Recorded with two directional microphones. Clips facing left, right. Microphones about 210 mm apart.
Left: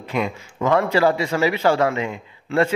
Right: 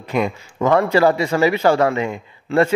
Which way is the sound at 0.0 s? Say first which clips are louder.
Right 3 dB; 45° right (ahead or behind).